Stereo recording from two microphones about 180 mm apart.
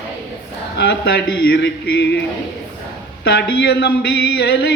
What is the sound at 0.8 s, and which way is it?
Music, 70° left (ahead or behind).